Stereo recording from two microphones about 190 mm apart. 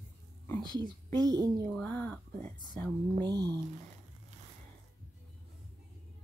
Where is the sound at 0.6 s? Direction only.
20° right (ahead or behind).